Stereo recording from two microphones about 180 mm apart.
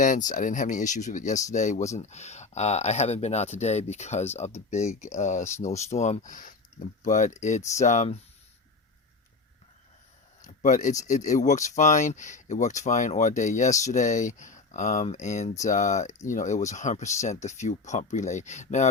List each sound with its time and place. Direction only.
0.0 s speech: 45° left (ahead or behind)
10.4 s a sound: 45° left (ahead or behind)
11.0 s speech: 40° left (ahead or behind)